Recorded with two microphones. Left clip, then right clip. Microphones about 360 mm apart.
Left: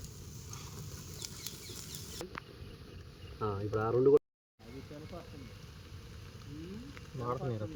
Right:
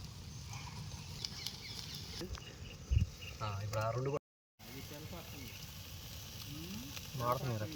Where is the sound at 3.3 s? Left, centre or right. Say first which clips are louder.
Left 6 dB; left.